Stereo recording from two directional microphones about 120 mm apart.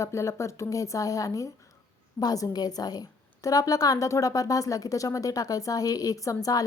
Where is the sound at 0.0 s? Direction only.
25° left (ahead or behind).